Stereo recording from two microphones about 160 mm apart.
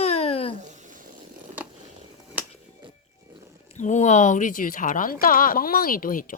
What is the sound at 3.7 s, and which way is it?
Speech, 50° left (ahead or behind).